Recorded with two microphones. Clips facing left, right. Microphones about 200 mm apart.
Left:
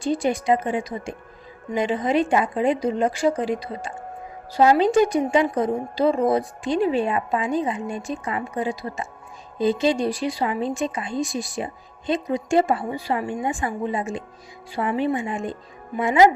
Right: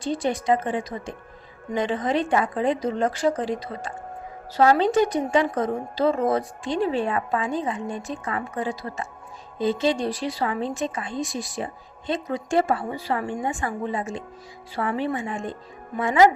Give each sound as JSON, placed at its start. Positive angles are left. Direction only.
{"t": 0.0, "sound": "speech", "side_deg": 10}